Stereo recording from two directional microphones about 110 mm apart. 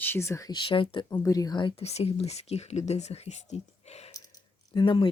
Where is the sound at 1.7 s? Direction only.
70° left (ahead or behind).